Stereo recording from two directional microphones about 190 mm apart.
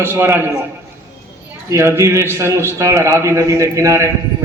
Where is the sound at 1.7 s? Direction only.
15° right (ahead or behind).